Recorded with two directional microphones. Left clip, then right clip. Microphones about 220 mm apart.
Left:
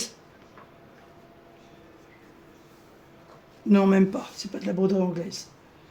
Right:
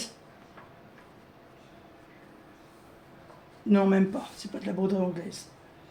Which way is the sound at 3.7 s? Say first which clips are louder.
Left 3 dB; 40° left (ahead or behind).